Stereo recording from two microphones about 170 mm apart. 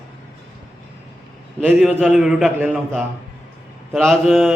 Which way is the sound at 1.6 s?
10° right (ahead or behind).